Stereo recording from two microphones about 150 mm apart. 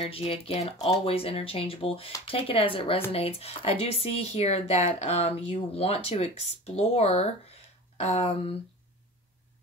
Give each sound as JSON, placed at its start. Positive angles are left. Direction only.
{"t": 0.0, "sound": "speech", "side_deg": 40}